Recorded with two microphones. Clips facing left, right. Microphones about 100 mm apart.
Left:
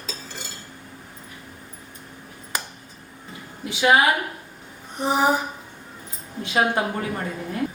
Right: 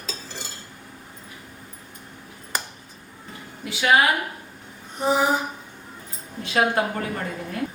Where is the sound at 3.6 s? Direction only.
20° left (ahead or behind).